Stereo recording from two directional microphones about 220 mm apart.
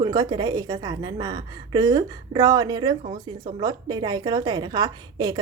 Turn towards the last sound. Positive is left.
turn(degrees=-20)  # may be behind; listen again after turning